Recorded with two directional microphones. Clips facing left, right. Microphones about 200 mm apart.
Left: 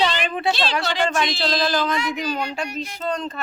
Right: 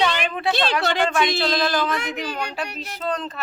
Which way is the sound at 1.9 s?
60° right (ahead or behind).